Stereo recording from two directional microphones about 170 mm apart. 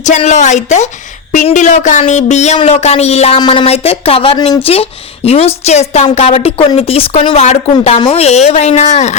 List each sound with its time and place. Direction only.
0.3 s a woman's voice: 45° left (ahead or behind)